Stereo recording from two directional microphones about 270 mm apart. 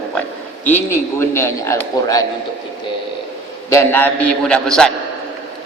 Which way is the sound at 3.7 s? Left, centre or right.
Centre.